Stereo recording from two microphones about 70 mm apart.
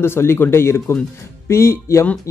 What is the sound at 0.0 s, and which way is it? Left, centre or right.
Speech, left.